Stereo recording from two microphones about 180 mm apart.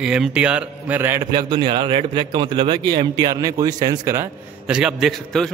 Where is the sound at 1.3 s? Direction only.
25° right (ahead or behind).